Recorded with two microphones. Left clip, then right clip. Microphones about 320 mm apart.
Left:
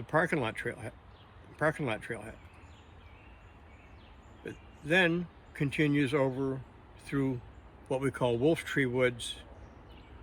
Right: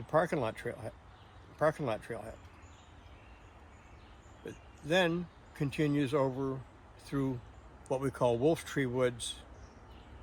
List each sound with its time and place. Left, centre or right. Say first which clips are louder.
0.1 s speech: left 1 dB; centre
4.4 s speech: left 3 dB; centre